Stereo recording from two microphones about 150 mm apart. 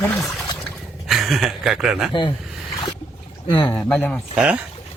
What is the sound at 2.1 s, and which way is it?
Speech, 35° left (ahead or behind).